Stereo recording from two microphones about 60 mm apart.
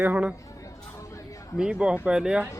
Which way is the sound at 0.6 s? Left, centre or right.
Left.